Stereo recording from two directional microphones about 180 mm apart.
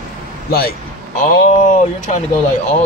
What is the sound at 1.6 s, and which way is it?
Speech, 40° left (ahead or behind).